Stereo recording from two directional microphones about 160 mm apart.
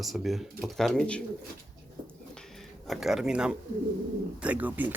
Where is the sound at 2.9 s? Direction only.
Centre (ahead or behind).